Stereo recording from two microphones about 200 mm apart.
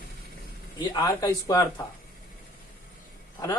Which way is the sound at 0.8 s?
20° left (ahead or behind).